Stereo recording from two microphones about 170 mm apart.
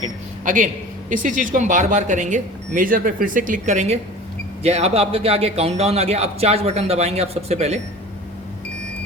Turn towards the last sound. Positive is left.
turn(degrees=-40)  # may be behind; listen again after turning